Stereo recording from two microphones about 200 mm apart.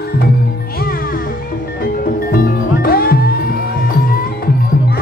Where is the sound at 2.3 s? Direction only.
50° left (ahead or behind).